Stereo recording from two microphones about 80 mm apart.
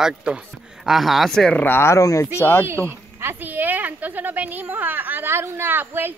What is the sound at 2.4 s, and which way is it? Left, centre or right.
Speech, left.